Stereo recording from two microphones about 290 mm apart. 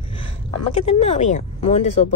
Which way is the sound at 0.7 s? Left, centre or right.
Left.